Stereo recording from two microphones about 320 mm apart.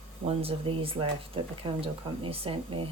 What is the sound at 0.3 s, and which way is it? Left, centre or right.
Speech, centre.